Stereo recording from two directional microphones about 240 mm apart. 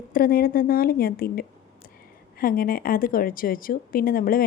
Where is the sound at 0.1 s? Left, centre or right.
Left.